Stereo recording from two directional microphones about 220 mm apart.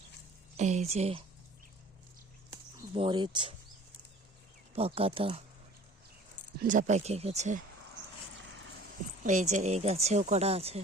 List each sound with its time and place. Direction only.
0.5 s speech: 30° right (ahead or behind)
2.9 s speech: 20° right (ahead or behind)
4.7 s speech: 25° right (ahead or behind)
6.6 s speech: 35° right (ahead or behind)
9.2 s speech: 35° right (ahead or behind)